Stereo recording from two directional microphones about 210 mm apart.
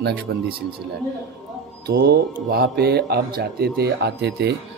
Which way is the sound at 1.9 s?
50° right (ahead or behind).